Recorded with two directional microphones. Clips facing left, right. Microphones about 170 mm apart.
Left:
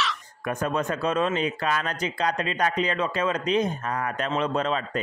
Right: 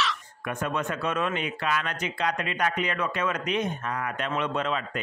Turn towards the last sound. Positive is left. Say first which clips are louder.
# left 3 dB
turn(degrees=35)  # may be behind; listen again after turning